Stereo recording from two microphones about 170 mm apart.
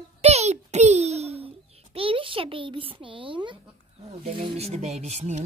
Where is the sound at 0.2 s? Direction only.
40° right (ahead or behind).